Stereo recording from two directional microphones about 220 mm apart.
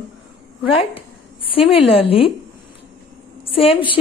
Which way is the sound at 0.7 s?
25° left (ahead or behind).